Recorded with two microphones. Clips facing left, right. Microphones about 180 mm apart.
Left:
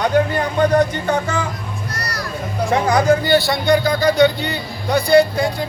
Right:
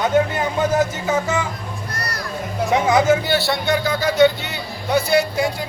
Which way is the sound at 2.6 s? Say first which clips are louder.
Even; centre (ahead or behind).